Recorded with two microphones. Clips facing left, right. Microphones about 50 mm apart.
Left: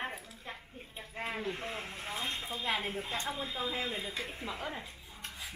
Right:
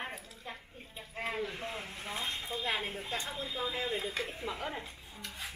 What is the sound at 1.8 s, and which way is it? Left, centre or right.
Speech, centre.